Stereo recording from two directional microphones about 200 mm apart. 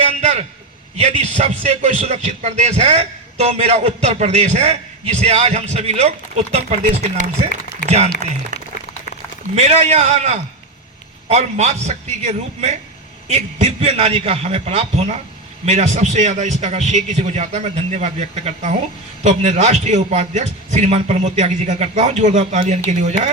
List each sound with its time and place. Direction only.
0.0 s a sound: 30° right (ahead or behind)
0.9 s a man's voice: 35° right (ahead or behind)
9.6 s a man's voice: 35° right (ahead or behind)